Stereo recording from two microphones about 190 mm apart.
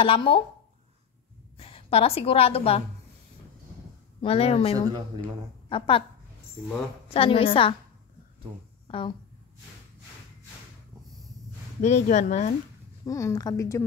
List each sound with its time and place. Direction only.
0.0 s a woman's voice: 25° left (ahead or behind)
1.6 s a woman's voice: 30° left (ahead or behind)
4.2 s speech: 30° left (ahead or behind)
4.7 s speech: 20° right (ahead or behind)
5.7 s a woman's voice: 25° left (ahead or behind)
7.1 s a woman's voice: 30° left (ahead or behind)
8.8 s a sound: 30° left (ahead or behind)
11.8 s speech: 35° left (ahead or behind)
13.0 s a woman's voice: 20° left (ahead or behind)